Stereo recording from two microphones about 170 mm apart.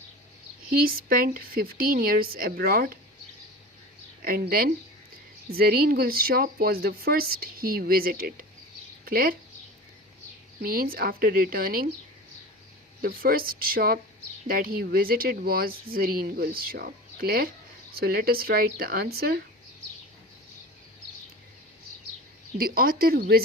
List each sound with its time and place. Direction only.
0.7 s speech: 60° right (ahead or behind)
4.2 s speech: 60° right (ahead or behind)
10.6 s speech: 60° right (ahead or behind)
13.0 s speech: 60° right (ahead or behind)
22.5 s speech: 60° right (ahead or behind)